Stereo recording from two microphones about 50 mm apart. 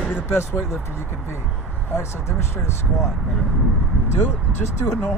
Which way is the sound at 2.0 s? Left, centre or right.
Left.